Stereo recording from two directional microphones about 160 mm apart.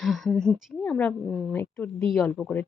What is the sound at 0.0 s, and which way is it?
A woman's voice, centre (ahead or behind).